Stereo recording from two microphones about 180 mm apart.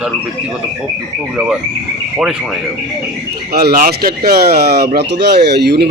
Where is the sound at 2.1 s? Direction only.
Centre (ahead or behind).